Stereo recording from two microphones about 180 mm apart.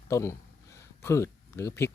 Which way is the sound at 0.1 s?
15° left (ahead or behind).